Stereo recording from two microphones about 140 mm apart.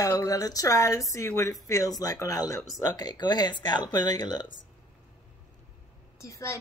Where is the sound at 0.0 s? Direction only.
25° left (ahead or behind).